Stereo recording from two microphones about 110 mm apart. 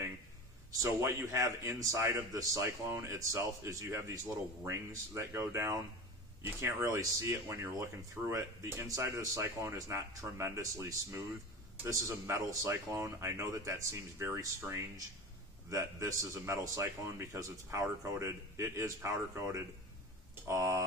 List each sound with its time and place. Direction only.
0.7 s a man's voice: 30° right (ahead or behind)